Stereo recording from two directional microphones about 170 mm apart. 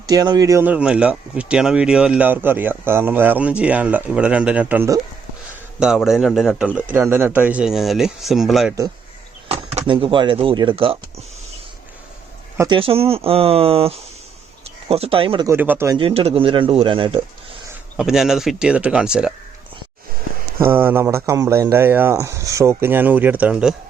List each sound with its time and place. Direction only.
0.1 s speech: 25° right (ahead or behind); by 8.7 s centre (ahead or behind)
9.5 s speech: 35° right (ahead or behind)
12.5 s speech: 25° right (ahead or behind)
15.4 s speech: 10° right (ahead or behind)
15.9 s speech: 30° right (ahead or behind)
17.9 s speech: 5° right (ahead or behind)
20.6 s speech: 10° right (ahead or behind)